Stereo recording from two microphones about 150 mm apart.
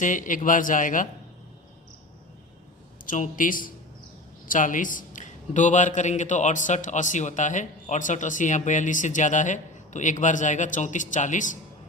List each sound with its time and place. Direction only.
0.0 s a man's voice: 60° left (ahead or behind)
3.1 s a man's voice: 65° left (ahead or behind)